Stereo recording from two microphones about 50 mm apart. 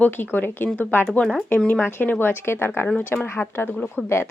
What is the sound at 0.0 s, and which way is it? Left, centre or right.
Speech, left.